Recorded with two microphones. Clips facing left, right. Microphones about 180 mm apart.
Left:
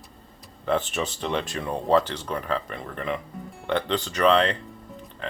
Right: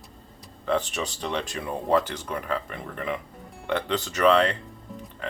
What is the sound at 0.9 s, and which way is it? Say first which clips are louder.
Speech: left 2 dB; centre (ahead or behind).